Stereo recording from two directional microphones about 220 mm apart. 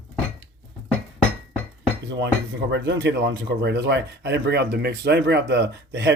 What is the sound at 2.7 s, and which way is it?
Speech, 55° right (ahead or behind).